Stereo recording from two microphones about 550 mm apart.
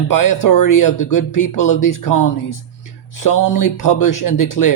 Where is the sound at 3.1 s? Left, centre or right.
Left.